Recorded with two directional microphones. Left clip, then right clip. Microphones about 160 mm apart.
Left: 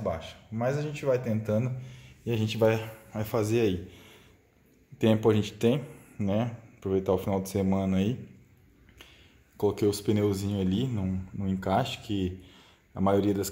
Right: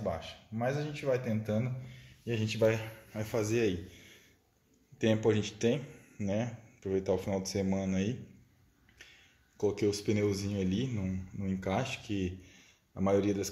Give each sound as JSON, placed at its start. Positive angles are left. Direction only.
{"t": 0.0, "sound": "a man's voice", "side_deg": 15}
{"t": 9.6, "sound": "speech", "side_deg": 20}